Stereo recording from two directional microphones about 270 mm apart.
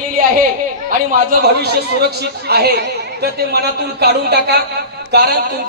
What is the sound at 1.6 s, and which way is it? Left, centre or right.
A man's voice, right.